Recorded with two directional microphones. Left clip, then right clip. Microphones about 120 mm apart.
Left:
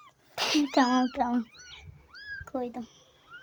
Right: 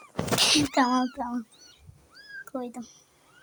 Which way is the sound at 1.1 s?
40° left (ahead or behind).